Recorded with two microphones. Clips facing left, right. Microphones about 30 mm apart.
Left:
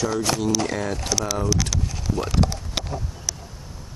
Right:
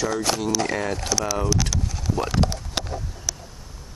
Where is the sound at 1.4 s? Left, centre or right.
Centre.